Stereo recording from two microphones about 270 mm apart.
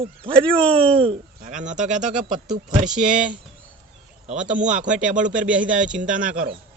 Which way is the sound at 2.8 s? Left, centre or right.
Centre.